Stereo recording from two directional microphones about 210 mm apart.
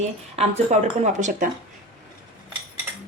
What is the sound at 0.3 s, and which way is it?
Speech, 30° right (ahead or behind).